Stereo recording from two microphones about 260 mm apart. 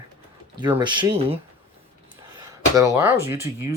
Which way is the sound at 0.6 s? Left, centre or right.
Centre.